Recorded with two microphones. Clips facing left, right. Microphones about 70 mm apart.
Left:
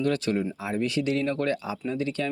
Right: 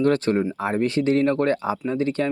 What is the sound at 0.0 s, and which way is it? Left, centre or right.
Speech, right.